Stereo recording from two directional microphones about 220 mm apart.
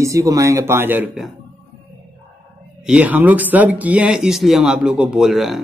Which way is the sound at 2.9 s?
5° right (ahead or behind).